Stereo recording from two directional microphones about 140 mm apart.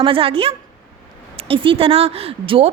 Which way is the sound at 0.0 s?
40° right (ahead or behind).